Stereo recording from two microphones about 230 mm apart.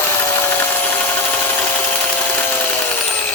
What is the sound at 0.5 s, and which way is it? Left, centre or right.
Tools, centre.